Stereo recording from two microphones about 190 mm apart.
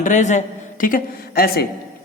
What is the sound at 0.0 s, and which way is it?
A man's voice, 40° left (ahead or behind).